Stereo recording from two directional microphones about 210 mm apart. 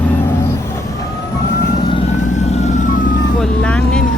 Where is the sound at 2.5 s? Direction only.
35° left (ahead or behind).